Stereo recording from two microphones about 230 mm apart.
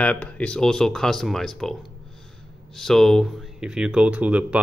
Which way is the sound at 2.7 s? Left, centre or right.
Centre.